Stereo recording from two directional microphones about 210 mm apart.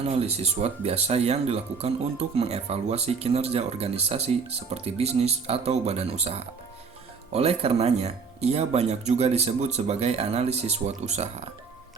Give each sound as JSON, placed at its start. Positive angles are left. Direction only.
{"t": 0.0, "sound": "speech", "side_deg": -30}